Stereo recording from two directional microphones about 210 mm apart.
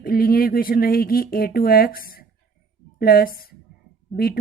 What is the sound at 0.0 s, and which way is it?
A woman's voice, 45° left (ahead or behind).